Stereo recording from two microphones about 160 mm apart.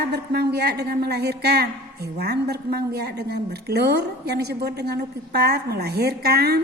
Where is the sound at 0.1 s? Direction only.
90° right.